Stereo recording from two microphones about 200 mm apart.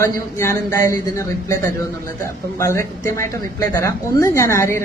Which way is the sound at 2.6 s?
15° left (ahead or behind).